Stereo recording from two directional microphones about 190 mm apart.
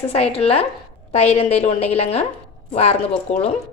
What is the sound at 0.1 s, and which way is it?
A woman's voice, 30° left (ahead or behind).